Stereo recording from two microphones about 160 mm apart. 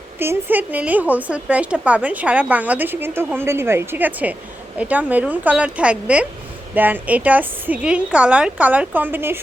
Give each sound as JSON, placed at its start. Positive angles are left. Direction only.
{"t": 0.2, "sound": "a woman's voice", "side_deg": -15}